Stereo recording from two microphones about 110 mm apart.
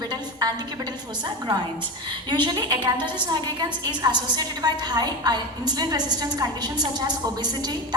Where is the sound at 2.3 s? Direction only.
40° right (ahead or behind).